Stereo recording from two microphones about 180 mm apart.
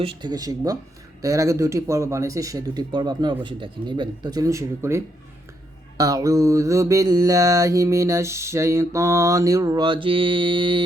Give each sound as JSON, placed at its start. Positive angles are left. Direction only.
{"t": 0.0, "sound": "speech", "side_deg": -25}
{"t": 1.2, "sound": "mantra", "side_deg": -15}
{"t": 3.4, "sound": "speech", "side_deg": -25}
{"t": 6.0, "sound": "mantra", "side_deg": -20}